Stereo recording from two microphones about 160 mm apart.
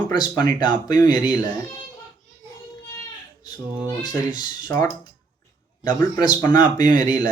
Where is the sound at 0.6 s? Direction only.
25° left (ahead or behind).